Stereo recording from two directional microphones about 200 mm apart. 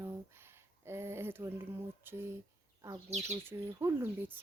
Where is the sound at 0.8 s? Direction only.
15° right (ahead or behind).